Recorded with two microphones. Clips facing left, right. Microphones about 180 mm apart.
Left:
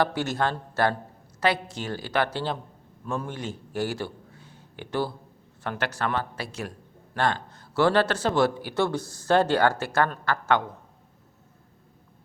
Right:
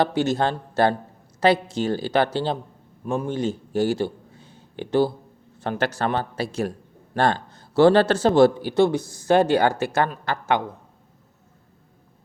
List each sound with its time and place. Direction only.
0.0 s a man's voice: 20° right (ahead or behind)